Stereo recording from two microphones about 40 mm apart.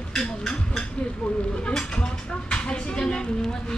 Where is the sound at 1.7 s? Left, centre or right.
Left.